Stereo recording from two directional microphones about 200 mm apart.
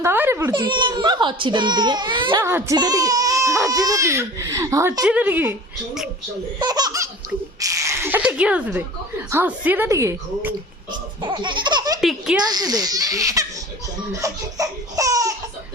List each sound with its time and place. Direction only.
0.0 s a child's voice: 10° right (ahead or behind)
2.4 s speech: 10° right (ahead or behind)
6.6 s a child's voice: 20° right (ahead or behind)
11.2 s laughter: 25° right (ahead or behind)
11.9 s speech: 5° right (ahead or behind)
12.5 s speech: 20° right (ahead or behind)
14.1 s laughter: 15° right (ahead or behind)